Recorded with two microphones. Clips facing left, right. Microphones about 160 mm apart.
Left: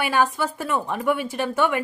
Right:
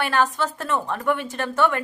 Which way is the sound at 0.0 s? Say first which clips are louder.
Even; 10° left (ahead or behind).